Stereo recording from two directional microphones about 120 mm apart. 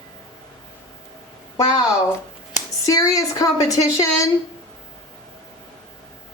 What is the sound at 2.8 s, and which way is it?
Speech, 30° left (ahead or behind).